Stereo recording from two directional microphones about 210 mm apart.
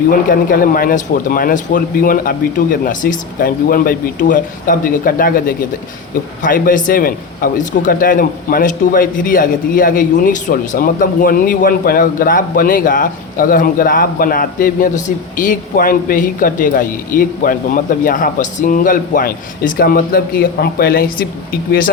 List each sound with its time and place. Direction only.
0.1 s a man's voice: 40° left (ahead or behind)